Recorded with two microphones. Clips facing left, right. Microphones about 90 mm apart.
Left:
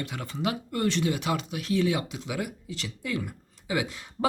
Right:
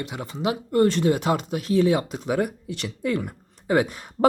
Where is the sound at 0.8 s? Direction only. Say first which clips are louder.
Right 7 dB; 45° right (ahead or behind).